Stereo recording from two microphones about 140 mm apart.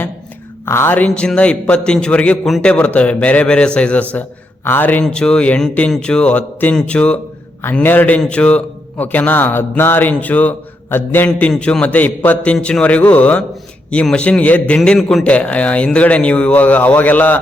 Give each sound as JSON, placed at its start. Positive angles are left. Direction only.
{"t": 0.6, "sound": "a man's voice", "side_deg": 15}